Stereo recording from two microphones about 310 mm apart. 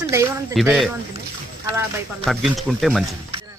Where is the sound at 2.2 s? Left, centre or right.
Centre.